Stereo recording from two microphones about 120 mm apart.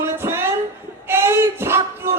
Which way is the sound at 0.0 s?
20° right (ahead or behind).